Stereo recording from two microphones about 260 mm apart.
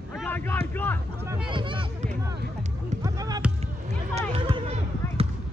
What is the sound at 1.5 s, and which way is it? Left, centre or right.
Speech, centre.